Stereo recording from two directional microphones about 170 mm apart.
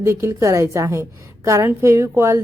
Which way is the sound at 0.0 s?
15° right (ahead or behind).